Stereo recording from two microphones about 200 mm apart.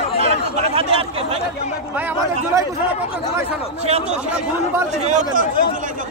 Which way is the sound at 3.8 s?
30° right (ahead or behind).